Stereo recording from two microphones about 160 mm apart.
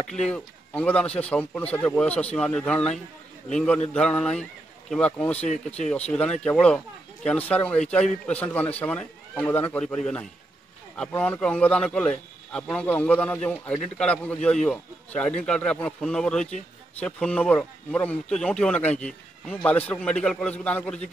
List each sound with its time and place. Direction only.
0.0 s a man's voice: 5° left (ahead or behind)